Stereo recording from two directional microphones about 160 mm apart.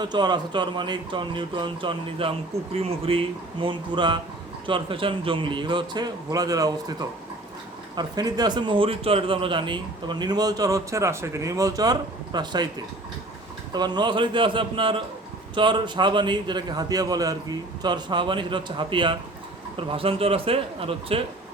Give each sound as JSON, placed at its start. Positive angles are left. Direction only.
{"t": 0.0, "sound": "a man's voice", "side_deg": -25}
{"t": 13.7, "sound": "a man's voice", "side_deg": -25}